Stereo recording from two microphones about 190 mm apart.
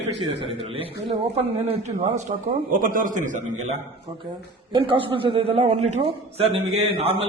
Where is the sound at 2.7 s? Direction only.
45° right (ahead or behind).